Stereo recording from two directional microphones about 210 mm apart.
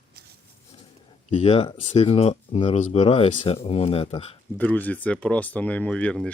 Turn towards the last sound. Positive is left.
turn(degrees=5)  # may be behind; listen again after turning